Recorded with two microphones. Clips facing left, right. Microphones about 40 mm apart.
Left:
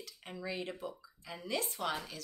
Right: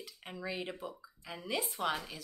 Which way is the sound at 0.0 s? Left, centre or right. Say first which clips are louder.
Right 1 dB; centre.